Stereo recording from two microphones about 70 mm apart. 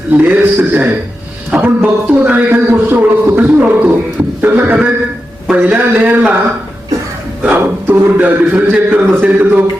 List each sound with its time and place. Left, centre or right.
0.2 s a man's voice: right
7.5 s a man's voice: right